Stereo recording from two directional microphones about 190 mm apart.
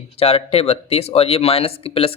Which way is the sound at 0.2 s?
30° left (ahead or behind).